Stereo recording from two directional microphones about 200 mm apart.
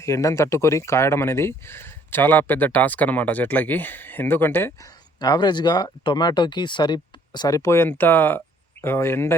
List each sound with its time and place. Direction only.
0.0 s speech: 15° left (ahead or behind)